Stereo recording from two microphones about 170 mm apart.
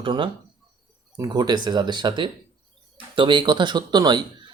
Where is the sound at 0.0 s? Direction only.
25° right (ahead or behind).